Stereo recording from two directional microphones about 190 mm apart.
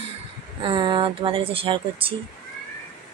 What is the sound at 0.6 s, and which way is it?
A woman's voice, 25° right (ahead or behind).